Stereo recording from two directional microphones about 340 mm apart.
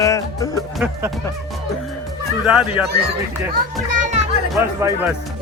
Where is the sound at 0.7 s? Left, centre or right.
Centre.